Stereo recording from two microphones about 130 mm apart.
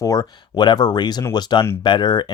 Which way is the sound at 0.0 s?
25° left (ahead or behind).